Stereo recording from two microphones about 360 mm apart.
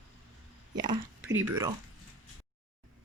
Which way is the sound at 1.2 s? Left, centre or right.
Right.